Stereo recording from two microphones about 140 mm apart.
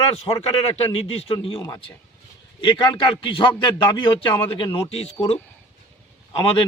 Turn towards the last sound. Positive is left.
turn(degrees=40)  # may be behind; listen again after turning